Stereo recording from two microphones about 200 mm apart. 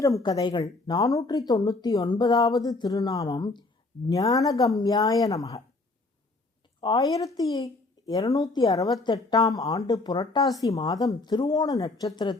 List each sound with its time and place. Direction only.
0.0 s speech: 20° left (ahead or behind)
6.8 s speech: 20° left (ahead or behind)